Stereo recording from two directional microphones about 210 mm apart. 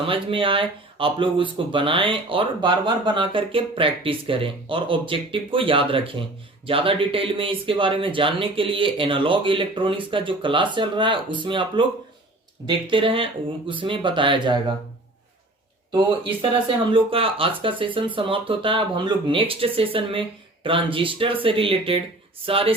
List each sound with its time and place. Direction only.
0.0 s speech: 25° right (ahead or behind)
15.9 s speech: 20° right (ahead or behind)